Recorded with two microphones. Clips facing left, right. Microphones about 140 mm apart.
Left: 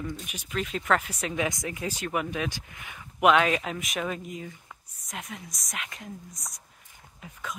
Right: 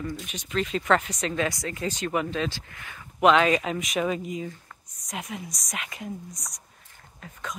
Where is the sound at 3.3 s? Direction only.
Centre (ahead or behind).